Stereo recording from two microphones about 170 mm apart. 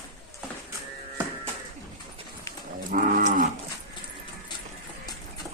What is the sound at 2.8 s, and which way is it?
Cattle, 55° right (ahead or behind).